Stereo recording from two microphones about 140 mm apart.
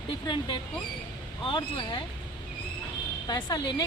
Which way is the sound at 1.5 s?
35° left (ahead or behind).